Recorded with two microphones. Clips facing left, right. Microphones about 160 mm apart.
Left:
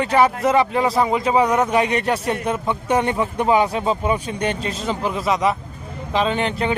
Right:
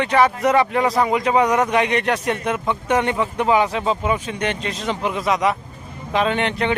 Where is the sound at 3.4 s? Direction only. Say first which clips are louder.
Left 1 dB; 35° left (ahead or behind).